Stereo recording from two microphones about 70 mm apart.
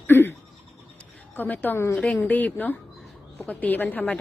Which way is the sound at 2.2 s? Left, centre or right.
Left.